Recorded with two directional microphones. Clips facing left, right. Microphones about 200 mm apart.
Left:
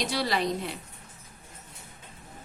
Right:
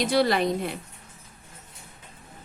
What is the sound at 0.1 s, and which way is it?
Speech, 55° right (ahead or behind).